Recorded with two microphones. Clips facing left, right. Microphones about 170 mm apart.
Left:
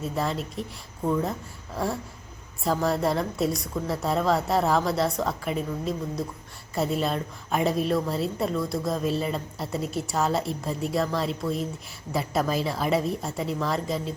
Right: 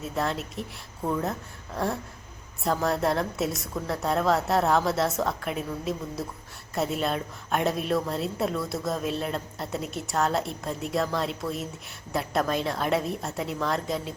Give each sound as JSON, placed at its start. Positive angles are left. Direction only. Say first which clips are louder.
{"t": 0.0, "sound": "a woman's voice", "louder": "left 1 dB", "side_deg": 0}